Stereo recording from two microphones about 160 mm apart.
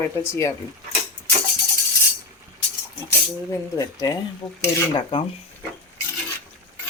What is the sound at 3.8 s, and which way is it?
Speech, 20° left (ahead or behind).